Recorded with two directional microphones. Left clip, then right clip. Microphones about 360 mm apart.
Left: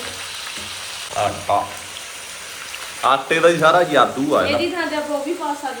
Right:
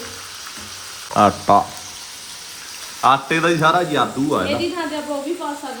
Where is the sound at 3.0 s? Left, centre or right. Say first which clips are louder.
Left 1 dB; centre.